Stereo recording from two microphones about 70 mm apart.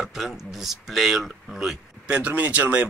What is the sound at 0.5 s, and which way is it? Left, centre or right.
Speech, centre.